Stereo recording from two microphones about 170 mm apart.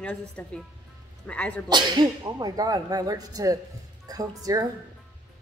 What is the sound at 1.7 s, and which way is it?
Speech, 25° right (ahead or behind).